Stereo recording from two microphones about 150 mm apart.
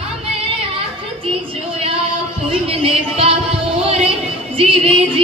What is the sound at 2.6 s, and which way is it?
Music, 40° right (ahead or behind).